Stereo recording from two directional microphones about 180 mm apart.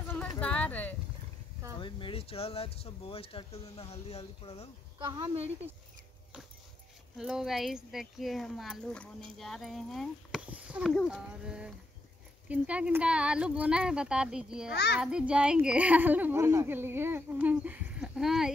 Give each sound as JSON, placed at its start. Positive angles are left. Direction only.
{"t": 0.1, "sound": "clip-clop", "side_deg": 5}
{"t": 1.8, "sound": "speech", "side_deg": 25}
{"t": 4.9, "sound": "speech", "side_deg": -25}
{"t": 7.2, "sound": "speech", "side_deg": 0}
{"t": 14.7, "sound": "a child's voice", "side_deg": 70}
{"t": 15.0, "sound": "speech", "side_deg": -5}